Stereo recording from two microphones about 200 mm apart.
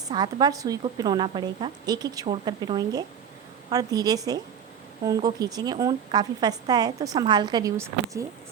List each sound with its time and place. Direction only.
0.1 s a woman's voice: 20° right (ahead or behind)